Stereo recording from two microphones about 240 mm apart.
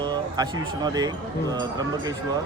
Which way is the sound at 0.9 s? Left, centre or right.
Centre.